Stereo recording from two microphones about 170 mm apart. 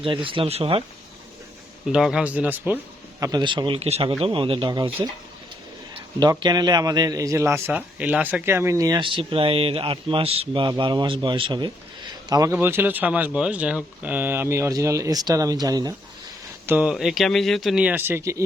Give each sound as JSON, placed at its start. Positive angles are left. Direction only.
{"t": 0.0, "sound": "speech", "side_deg": -30}
{"t": 1.9, "sound": "speech", "side_deg": -5}
{"t": 3.2, "sound": "a man's voice", "side_deg": -20}
{"t": 5.9, "sound": "a man's voice", "side_deg": -25}
{"t": 16.6, "sound": "speech", "side_deg": -10}